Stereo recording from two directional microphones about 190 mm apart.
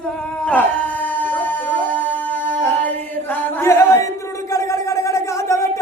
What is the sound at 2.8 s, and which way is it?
Chant, 10° left (ahead or behind).